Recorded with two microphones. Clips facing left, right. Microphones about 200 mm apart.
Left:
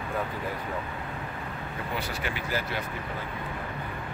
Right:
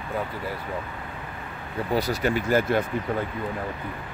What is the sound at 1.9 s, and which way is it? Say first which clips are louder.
Speech: right 11 dB; 40° right (ahead or behind).